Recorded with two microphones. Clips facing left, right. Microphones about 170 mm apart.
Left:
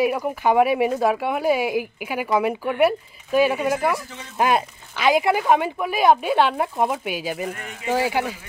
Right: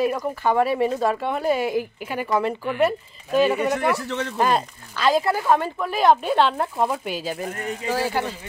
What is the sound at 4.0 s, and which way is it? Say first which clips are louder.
Speech: right 11 dB; 75° right (ahead or behind).